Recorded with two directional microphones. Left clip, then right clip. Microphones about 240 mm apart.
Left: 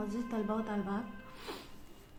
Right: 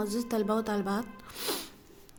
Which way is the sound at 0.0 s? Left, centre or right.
Right.